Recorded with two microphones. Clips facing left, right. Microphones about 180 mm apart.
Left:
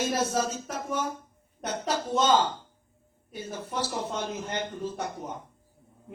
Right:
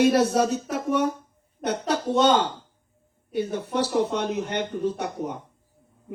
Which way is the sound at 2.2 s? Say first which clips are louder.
Right 1 dB; 65° right (ahead or behind).